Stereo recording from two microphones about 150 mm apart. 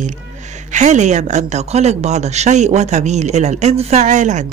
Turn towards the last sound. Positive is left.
turn(degrees=-55)  # may be behind; listen again after turning